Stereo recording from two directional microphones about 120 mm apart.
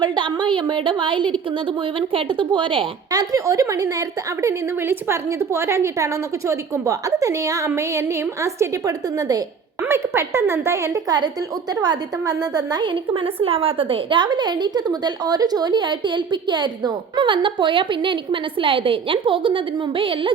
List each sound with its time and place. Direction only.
0.0 s a woman's voice: 40° right (ahead or behind)
3.1 s a woman's voice: 30° right (ahead or behind)
9.8 s a woman's voice: 20° right (ahead or behind); by 20.3 s 45° right (ahead or behind)